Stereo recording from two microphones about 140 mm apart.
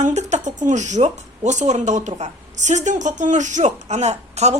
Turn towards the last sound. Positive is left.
turn(degrees=-50)  # may be behind; listen again after turning